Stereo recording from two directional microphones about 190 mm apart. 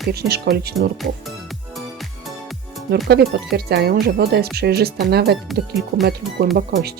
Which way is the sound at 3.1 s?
55° right (ahead or behind).